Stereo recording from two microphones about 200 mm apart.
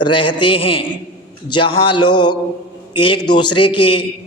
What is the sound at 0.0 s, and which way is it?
A man's voice, 25° left (ahead or behind).